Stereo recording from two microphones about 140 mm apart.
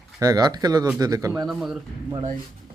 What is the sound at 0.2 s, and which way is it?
Speech, 25° right (ahead or behind).